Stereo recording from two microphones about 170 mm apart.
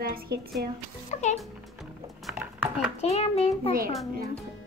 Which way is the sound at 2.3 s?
10° right (ahead or behind).